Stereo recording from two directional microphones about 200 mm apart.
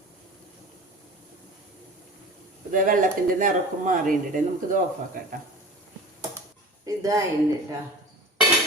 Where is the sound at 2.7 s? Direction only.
40° right (ahead or behind).